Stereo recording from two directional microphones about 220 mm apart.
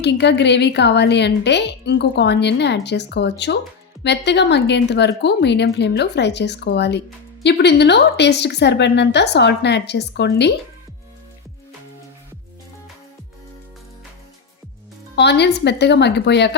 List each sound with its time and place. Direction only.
0.0 s a woman's voice: 50° left (ahead or behind)
15.1 s a woman's voice: 50° left (ahead or behind)